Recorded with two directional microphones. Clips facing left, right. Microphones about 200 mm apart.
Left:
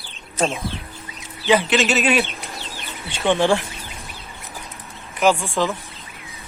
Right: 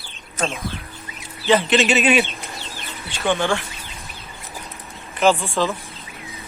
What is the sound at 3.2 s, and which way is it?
Speech, 25° left (ahead or behind).